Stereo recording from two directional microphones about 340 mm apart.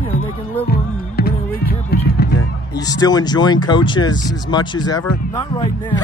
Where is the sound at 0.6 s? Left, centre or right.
Left.